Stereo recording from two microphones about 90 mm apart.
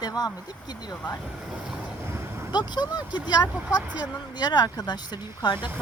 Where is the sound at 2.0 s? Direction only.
30° right (ahead or behind).